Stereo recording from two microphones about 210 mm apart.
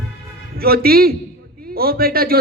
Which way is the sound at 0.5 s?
45° right (ahead or behind).